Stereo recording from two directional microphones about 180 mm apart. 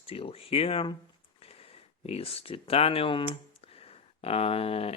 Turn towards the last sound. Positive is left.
turn(degrees=35)  # may be behind; listen again after turning